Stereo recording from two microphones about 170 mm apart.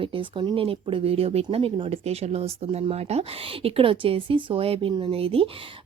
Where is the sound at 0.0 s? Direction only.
30° right (ahead or behind).